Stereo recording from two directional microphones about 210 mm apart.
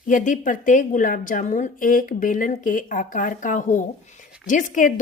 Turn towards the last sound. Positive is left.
turn(degrees=40)  # may be behind; listen again after turning